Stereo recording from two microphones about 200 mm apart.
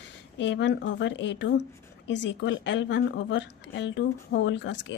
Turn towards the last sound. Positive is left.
turn(degrees=65)  # may be behind; listen again after turning